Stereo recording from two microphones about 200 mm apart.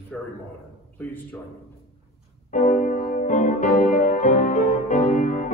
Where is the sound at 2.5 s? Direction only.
35° left (ahead or behind).